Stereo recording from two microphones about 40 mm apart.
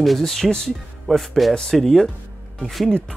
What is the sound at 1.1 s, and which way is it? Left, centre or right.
Speech, centre.